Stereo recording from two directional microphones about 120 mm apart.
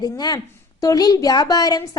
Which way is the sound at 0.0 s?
35° left (ahead or behind).